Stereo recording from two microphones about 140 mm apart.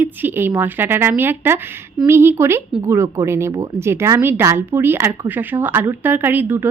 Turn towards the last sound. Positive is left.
turn(degrees=-15)  # may be behind; listen again after turning